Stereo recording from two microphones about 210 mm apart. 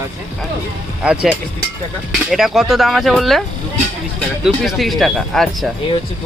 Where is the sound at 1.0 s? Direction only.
5° right (ahead or behind).